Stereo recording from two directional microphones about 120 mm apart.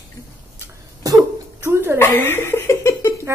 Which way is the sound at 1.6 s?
20° right (ahead or behind).